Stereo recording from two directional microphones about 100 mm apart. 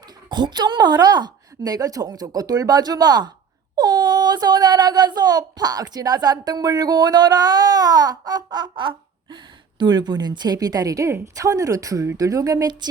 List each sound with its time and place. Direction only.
0.3 s speech: 50° right (ahead or behind)